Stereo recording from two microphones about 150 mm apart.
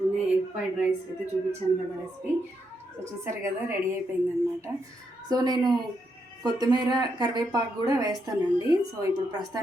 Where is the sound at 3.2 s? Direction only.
20° right (ahead or behind).